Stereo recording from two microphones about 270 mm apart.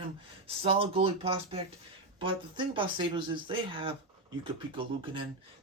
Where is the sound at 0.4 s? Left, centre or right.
Right.